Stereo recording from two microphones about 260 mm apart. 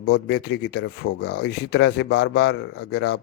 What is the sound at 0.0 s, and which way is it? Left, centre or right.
Speech, left.